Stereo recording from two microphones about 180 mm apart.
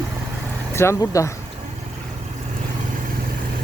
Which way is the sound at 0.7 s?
15° left (ahead or behind).